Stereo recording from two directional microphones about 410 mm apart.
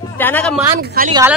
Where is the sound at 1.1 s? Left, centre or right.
Centre.